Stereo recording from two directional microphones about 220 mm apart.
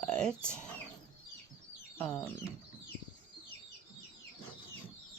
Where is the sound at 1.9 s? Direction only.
10° left (ahead or behind).